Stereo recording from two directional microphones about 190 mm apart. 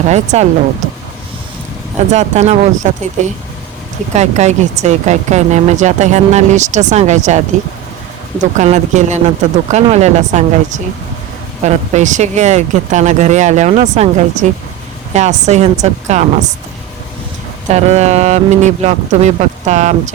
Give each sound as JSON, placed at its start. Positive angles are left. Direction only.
{"t": 0.1, "sound": "speech", "side_deg": -35}
{"t": 2.0, "sound": "speech", "side_deg": -40}
{"t": 4.1, "sound": "speech", "side_deg": -35}
{"t": 8.5, "sound": "speech", "side_deg": -40}
{"t": 17.7, "sound": "speech", "side_deg": -35}